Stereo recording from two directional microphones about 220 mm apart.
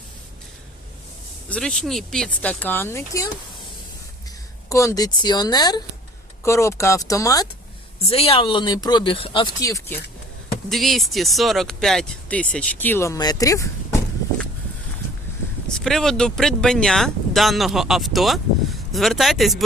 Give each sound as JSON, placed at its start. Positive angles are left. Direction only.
{"t": 1.5, "sound": "speech", "side_deg": 5}
{"t": 4.7, "sound": "speech", "side_deg": 15}
{"t": 7.9, "sound": "speech", "side_deg": 25}
{"t": 10.7, "sound": "speech", "side_deg": 0}
{"t": 15.7, "sound": "speech", "side_deg": 0}